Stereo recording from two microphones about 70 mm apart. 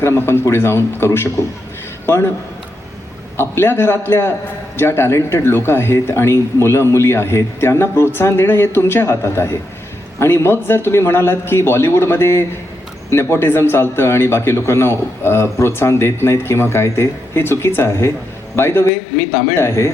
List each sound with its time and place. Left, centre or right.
0.0 s a man's voice: left
3.3 s a man's voice: left